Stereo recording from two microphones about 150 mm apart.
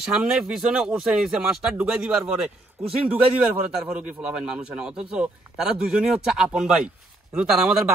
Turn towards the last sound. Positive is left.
turn(degrees=-5)  # may be behind; listen again after turning